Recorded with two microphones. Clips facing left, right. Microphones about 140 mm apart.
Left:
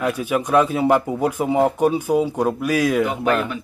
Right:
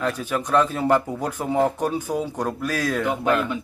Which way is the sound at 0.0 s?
10° left (ahead or behind).